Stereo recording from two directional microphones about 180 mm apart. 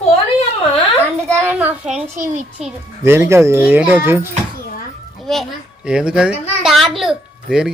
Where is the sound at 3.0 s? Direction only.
15° right (ahead or behind).